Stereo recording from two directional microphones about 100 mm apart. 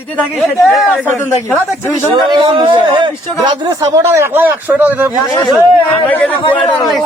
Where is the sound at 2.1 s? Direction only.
50° right (ahead or behind).